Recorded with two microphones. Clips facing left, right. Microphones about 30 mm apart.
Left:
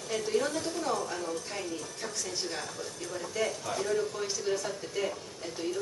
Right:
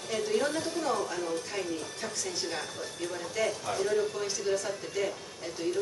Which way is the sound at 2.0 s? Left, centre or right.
Centre.